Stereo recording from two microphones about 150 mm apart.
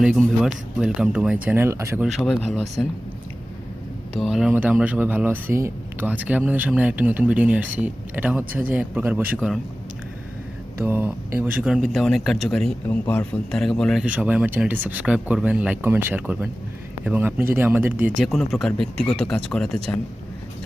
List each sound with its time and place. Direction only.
0.0 s speech: 5° right (ahead or behind)
2.0 s speech: centre (ahead or behind)
4.1 s speech: centre (ahead or behind)
10.8 s speech: 15° right (ahead or behind)
11.9 s speech: centre (ahead or behind)
18.2 s speech: centre (ahead or behind)